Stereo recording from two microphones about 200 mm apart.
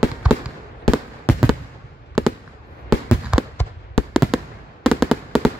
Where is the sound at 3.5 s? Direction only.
Centre (ahead or behind).